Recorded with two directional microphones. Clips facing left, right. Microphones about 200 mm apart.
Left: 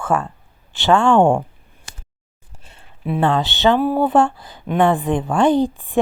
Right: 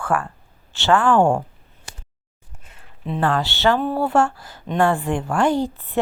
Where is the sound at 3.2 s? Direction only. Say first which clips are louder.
Left 3 dB; 20° left (ahead or behind).